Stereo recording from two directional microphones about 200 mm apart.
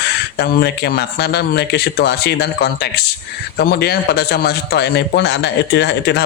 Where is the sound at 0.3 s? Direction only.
55° left (ahead or behind).